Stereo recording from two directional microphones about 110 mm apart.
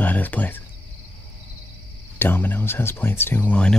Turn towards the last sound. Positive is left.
turn(degrees=10)  # may be behind; listen again after turning